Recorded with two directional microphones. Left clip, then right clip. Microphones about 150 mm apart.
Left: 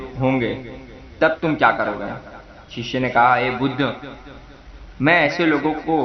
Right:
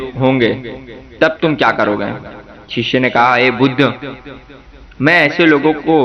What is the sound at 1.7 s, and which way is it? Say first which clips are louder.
A man's voice: right 6 dB; 40° right (ahead or behind).